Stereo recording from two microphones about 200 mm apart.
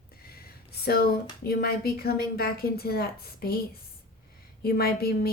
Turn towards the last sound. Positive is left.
turn(degrees=50)  # may be behind; listen again after turning